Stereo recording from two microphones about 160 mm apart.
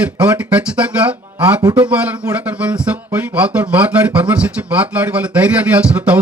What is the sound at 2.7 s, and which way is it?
Speech, 10° right (ahead or behind).